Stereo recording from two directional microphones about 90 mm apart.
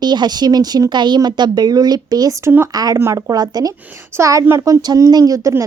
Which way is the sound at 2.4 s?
25° right (ahead or behind).